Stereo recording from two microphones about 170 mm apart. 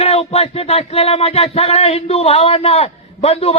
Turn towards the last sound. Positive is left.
turn(degrees=35)  # may be behind; listen again after turning